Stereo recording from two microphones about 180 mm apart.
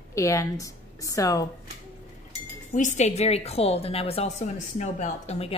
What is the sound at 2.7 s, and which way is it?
A woman's voice, 45° left (ahead or behind).